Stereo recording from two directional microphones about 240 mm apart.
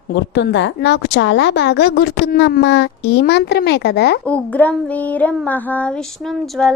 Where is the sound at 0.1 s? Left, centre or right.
Left.